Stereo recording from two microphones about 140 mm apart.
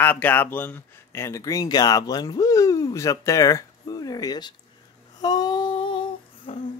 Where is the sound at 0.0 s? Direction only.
10° left (ahead or behind); by 4.6 s 30° left (ahead or behind).